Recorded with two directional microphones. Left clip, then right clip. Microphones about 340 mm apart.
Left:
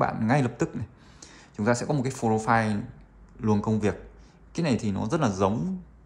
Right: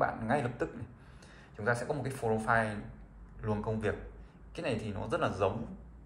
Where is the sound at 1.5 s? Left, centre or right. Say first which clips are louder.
Left 6 dB; centre.